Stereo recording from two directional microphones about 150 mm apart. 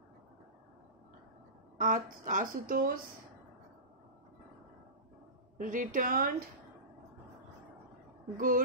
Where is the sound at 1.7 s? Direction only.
65° right (ahead or behind).